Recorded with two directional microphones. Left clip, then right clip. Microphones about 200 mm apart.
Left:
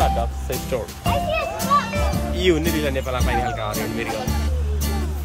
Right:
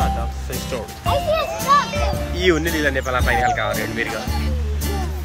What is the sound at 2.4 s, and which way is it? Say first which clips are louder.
Speech: right 2 dB; 5° left (ahead or behind).